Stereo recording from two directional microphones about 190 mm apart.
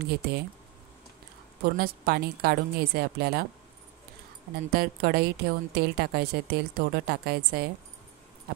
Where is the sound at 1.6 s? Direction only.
55° right (ahead or behind).